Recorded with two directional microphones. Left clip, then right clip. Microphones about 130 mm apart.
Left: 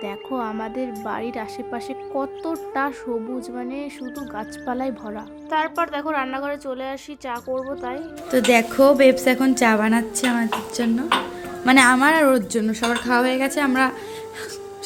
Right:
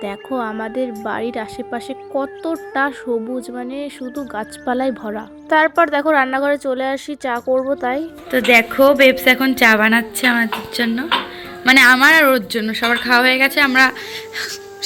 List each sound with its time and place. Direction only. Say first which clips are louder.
0.0 s speech: right 4 dB; 10° right (ahead or behind)
4.4 s speech: right 7 dB; 20° right (ahead or behind)
7.4 s speech: right 10 dB; centre (ahead or behind)
7.7 s speech: right 9 dB; 30° right (ahead or behind)
8.3 s a woman's voice: right 4 dB; 15° left (ahead or behind)
11.6 s a woman's voice: right 5 dB; 25° left (ahead or behind)
14.3 s whimper: right 6 dB; 15° left (ahead or behind)